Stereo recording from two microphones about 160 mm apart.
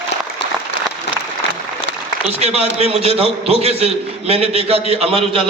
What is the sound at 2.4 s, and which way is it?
A man's voice, 40° right (ahead or behind).